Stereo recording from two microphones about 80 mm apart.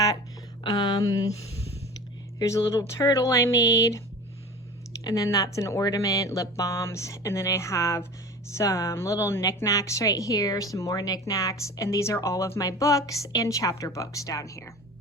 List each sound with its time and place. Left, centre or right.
0.6 s speech: left
2.4 s speech: left
5.0 s a woman's voice: left